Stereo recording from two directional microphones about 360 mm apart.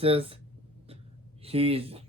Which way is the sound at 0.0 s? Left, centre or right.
Centre.